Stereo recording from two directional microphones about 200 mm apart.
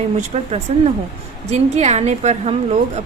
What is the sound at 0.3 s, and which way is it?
A woman's voice, 35° right (ahead or behind).